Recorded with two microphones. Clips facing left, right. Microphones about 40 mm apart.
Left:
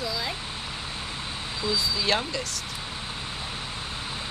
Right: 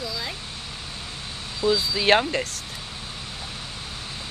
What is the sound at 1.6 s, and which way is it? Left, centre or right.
Speech, right.